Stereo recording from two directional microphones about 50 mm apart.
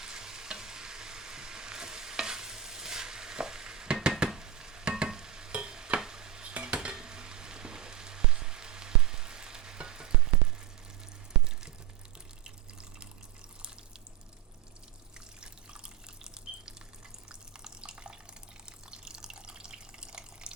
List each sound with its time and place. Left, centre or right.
0.0 s stir: centre
6.5 s dishes: right
6.8 s frying: centre
15.4 s water: centre